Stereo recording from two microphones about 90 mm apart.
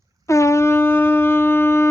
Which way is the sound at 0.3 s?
35° left (ahead or behind).